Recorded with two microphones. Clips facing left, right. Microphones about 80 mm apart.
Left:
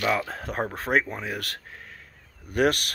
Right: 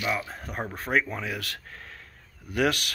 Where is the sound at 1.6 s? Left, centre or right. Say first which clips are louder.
Even; centre.